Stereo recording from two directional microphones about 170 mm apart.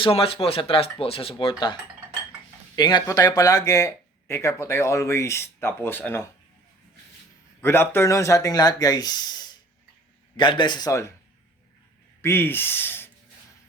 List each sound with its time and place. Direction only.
0.0 s speech: 35° left (ahead or behind)
2.7 s speech: 25° left (ahead or behind)
7.6 s speech: 15° left (ahead or behind)
12.2 s speech: 15° left (ahead or behind)